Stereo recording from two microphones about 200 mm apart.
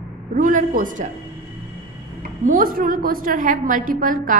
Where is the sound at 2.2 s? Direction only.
45° right (ahead or behind).